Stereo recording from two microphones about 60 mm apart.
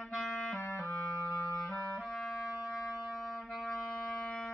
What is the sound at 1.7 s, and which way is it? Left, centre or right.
Clarinet, centre.